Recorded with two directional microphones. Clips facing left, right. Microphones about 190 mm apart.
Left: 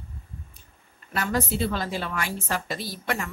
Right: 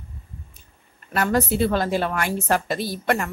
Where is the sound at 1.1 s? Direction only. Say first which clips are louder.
Right 5 dB; 55° right (ahead or behind).